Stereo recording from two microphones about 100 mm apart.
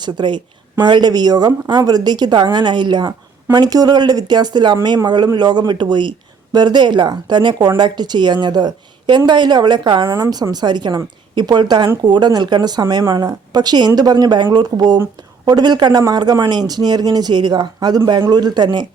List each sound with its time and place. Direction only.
0.0 s speech: 50° right (ahead or behind)